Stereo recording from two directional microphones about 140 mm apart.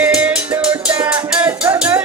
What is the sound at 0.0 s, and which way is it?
Music, 10° right (ahead or behind).